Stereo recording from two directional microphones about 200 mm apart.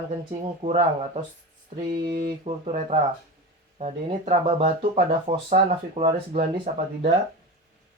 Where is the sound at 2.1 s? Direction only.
50° right (ahead or behind).